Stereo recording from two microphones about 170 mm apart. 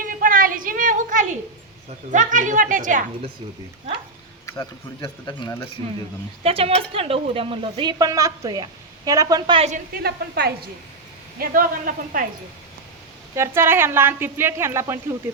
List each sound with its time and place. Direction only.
0.0 s a sound: 55° right (ahead or behind)
2.1 s a woman's voice: 50° right (ahead or behind)
4.4 s speech: 15° left (ahead or behind)
6.4 s a woman's voice: 35° right (ahead or behind)
9.6 s a woman's voice: 40° right (ahead or behind)
9.9 s a woman's voice: 70° right (ahead or behind)
11.3 s a man's voice: 55° right (ahead or behind)
13.3 s a woman's voice: 15° right (ahead or behind)